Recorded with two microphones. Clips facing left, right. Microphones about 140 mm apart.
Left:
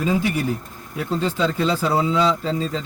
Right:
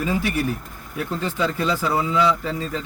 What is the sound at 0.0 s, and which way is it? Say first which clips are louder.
Speech: left 2 dB; 20° left (ahead or behind).